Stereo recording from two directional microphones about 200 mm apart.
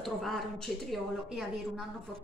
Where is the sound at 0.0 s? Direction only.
Centre (ahead or behind).